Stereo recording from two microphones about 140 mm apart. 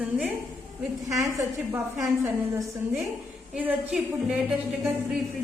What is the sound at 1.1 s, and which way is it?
A woman's voice, 25° right (ahead or behind).